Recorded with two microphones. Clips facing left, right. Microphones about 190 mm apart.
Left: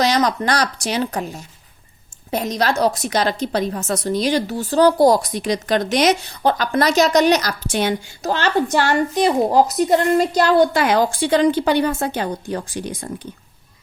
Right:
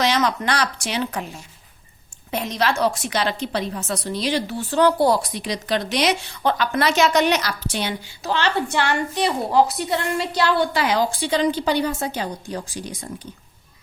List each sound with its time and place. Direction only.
0.0 s a woman's voice: 40° left (ahead or behind); by 13.2 s 55° left (ahead or behind)